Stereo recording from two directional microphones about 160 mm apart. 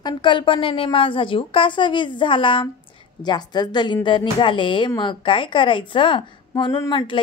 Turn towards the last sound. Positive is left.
turn(degrees=30)  # may be behind; listen again after turning